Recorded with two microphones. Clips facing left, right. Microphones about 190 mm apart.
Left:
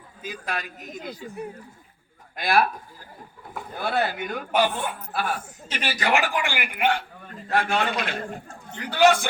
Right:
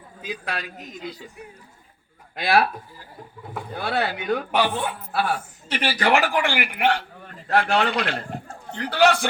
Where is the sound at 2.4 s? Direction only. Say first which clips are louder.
Right 2 dB; 50° left (ahead or behind).